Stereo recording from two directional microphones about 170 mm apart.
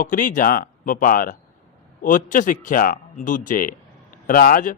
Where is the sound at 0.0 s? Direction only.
50° left (ahead or behind).